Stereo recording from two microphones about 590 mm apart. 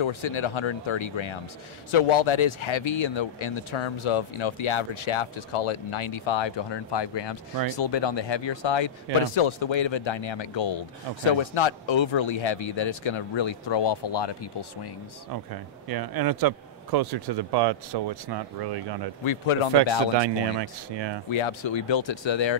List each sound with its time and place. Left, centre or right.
0.0 s speech: left
15.5 s a man's voice: right
19.2 s speech: left
20.2 s speech: right
21.3 s speech: left